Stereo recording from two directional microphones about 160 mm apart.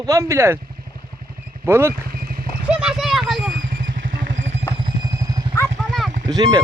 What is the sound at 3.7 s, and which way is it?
Vehicle, 60° right (ahead or behind).